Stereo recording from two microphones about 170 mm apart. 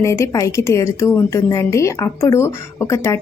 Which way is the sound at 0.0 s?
20° left (ahead or behind).